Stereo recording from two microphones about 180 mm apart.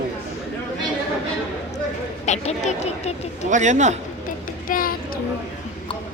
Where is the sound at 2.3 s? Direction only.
40° left (ahead or behind).